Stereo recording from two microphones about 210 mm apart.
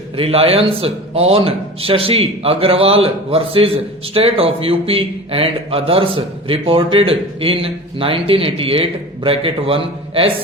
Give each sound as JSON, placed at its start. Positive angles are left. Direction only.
{"t": 0.2, "sound": "a man's voice", "side_deg": -30}